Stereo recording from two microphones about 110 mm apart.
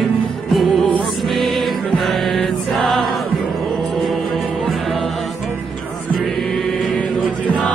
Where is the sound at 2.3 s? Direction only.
Centre (ahead or behind).